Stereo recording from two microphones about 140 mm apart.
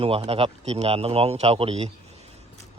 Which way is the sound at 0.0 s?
45° right (ahead or behind).